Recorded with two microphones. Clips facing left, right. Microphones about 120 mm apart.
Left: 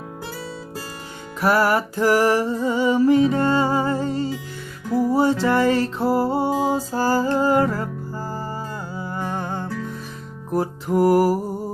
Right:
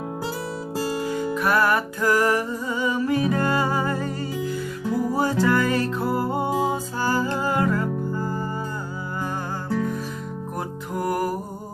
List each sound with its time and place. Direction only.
1.4 s music: 30° left (ahead or behind)
10.5 s music: 30° left (ahead or behind)